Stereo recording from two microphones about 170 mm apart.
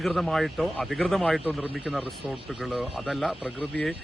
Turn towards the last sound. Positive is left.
turn(degrees=5)  # may be behind; listen again after turning